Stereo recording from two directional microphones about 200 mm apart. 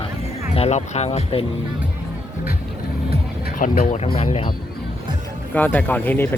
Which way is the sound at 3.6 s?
40° left (ahead or behind).